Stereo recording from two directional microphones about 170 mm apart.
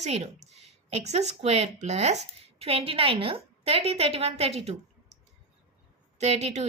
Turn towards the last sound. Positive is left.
turn(degrees=-40)  # may be behind; listen again after turning